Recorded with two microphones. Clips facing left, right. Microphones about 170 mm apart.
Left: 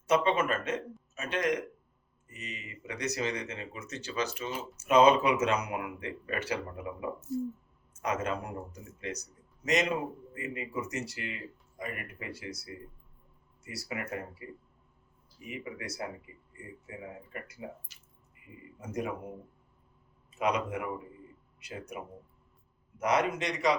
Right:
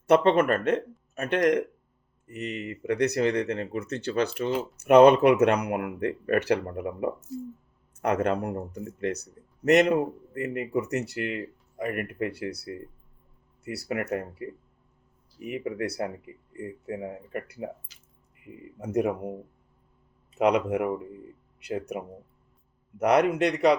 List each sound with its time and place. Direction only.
0.1 s speech: 60° right (ahead or behind)
20.3 s speech: 65° right (ahead or behind)